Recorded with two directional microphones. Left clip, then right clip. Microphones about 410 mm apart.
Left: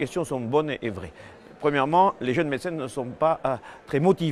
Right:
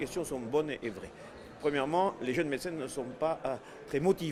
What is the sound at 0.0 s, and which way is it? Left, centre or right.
Speech, left.